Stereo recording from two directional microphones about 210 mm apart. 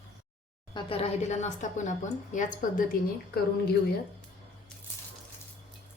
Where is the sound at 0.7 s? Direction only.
25° left (ahead or behind).